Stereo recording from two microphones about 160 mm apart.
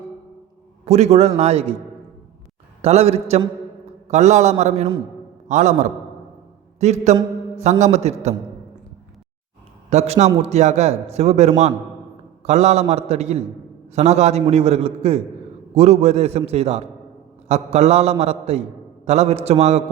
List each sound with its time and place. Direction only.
0.9 s a man's voice: 40° right (ahead or behind)
2.8 s a man's voice: 40° right (ahead or behind)
9.9 s a man's voice: 45° right (ahead or behind)